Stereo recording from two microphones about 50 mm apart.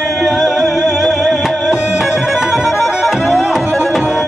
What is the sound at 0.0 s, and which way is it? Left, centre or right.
Music, centre.